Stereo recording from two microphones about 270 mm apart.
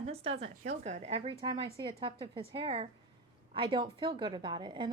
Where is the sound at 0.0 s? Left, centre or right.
Right.